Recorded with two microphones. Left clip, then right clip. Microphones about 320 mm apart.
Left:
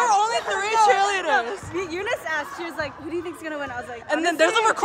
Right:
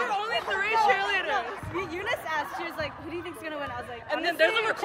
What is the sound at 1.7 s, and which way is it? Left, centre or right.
Speech, left.